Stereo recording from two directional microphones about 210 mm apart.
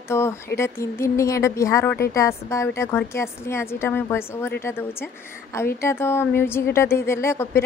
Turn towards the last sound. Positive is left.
turn(degrees=10)  # may be behind; listen again after turning